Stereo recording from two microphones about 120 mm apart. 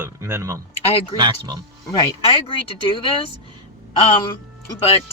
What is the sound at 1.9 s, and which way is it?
Speech, 45° left (ahead or behind).